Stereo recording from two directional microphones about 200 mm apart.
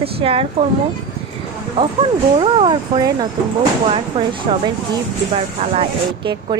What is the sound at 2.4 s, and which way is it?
Speech, 25° right (ahead or behind).